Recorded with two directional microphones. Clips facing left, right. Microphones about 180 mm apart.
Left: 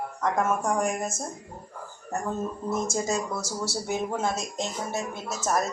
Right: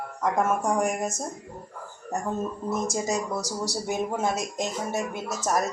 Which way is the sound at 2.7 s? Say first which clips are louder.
Even; 15° right (ahead or behind).